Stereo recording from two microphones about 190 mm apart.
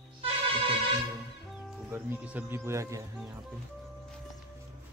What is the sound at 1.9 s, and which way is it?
Speech, 10° right (ahead or behind).